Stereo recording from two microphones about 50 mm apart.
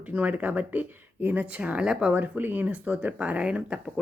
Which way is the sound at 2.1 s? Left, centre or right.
Right.